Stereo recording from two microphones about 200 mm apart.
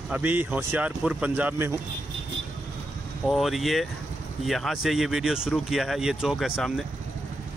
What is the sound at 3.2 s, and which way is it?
Speech, centre (ahead or behind).